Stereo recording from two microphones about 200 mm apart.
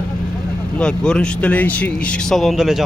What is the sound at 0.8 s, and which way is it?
Speech, 5° left (ahead or behind).